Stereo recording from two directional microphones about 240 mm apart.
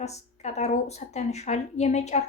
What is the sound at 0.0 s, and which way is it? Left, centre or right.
Speech, left.